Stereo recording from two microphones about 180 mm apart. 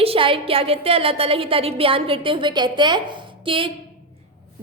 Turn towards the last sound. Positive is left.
turn(degrees=-30)  # may be behind; listen again after turning